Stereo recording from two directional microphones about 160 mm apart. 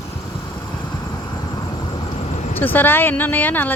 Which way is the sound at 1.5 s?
30° left (ahead or behind).